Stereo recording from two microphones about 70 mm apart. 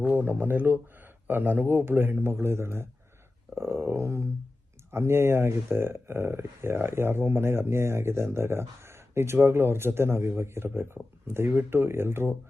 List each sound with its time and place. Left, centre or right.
0.0 s speech: right